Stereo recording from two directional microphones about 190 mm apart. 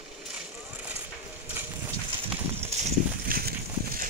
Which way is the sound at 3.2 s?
50° right (ahead or behind).